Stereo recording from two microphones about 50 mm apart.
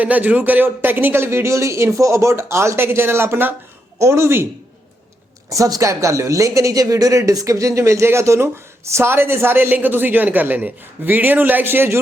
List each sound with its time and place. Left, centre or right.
0.0 s a man's voice: right
3.9 s speech: right
5.5 s speech: right
8.9 s a man's voice: right